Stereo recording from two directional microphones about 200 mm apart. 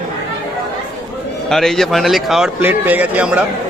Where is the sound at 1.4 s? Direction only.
Centre (ahead or behind).